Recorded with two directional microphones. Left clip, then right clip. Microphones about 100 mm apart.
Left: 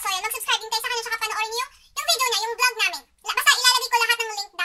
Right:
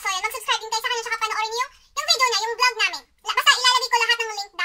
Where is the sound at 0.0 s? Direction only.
20° left (ahead or behind).